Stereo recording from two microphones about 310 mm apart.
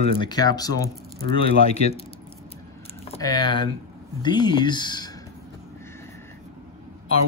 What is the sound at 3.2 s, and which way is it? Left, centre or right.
Speech, centre.